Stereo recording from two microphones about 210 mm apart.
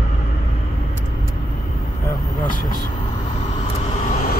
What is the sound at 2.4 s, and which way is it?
Vehicle, 40° left (ahead or behind).